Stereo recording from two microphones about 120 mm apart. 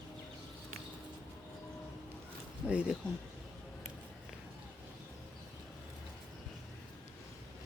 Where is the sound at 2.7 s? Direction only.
10° right (ahead or behind).